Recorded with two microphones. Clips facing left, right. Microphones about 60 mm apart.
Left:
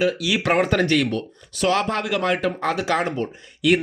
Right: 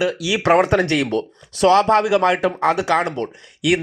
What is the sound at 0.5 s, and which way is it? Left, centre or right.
Speech, right.